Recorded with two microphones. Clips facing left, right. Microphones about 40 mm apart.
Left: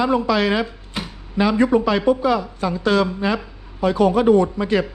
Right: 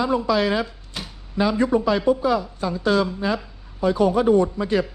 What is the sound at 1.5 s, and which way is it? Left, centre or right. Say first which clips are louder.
A man's voice: left 3 dB; left.